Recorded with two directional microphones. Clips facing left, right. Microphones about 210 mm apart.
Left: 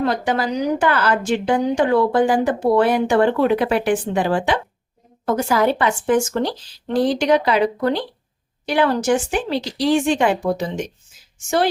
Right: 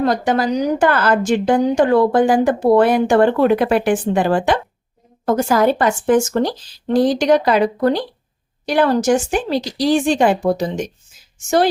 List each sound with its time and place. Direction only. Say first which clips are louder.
0.0 s a woman's voice: right 3 dB; 45° right (ahead or behind)